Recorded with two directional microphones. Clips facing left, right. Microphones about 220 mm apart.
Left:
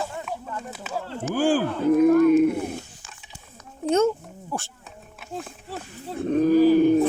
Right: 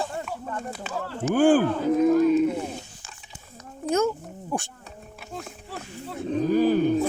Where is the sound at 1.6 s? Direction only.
60° left (ahead or behind).